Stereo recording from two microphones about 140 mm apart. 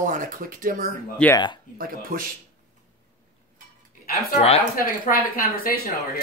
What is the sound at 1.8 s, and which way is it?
Speech, 90° right.